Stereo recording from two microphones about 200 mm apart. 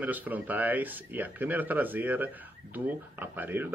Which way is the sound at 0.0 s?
10° right (ahead or behind).